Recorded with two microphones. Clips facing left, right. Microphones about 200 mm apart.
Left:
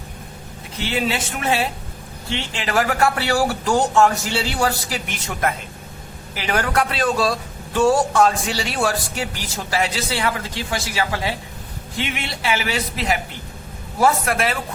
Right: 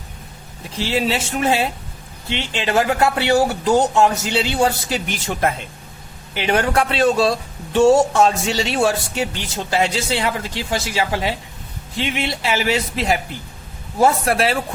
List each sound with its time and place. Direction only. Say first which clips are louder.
0.8 s a man's voice: right 3 dB; 30° right (ahead or behind)